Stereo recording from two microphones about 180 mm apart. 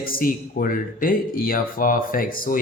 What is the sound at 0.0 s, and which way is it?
Speech, 50° left (ahead or behind).